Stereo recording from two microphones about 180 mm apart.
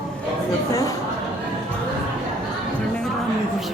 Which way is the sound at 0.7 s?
15° left (ahead or behind).